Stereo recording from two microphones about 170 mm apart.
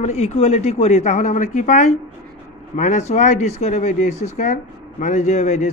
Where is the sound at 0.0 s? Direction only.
40° left (ahead or behind).